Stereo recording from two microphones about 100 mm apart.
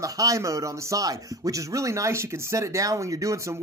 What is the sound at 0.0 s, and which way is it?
Speech, 35° right (ahead or behind).